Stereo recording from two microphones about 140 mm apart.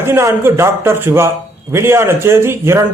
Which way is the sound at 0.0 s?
20° right (ahead or behind).